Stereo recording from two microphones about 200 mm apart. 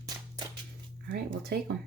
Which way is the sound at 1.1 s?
50° right (ahead or behind).